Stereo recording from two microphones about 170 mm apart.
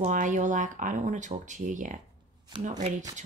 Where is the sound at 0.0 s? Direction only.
45° right (ahead or behind).